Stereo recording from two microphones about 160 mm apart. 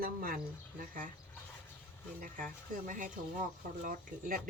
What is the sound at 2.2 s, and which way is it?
Speech, 55° right (ahead or behind).